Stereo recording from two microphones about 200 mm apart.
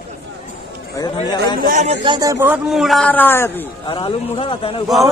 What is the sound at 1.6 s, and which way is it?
Speech, 40° right (ahead or behind).